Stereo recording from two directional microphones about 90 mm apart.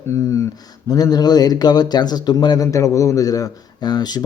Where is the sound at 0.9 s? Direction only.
45° left (ahead or behind).